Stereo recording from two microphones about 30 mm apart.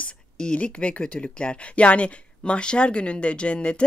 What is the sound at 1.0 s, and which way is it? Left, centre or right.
Speech, left.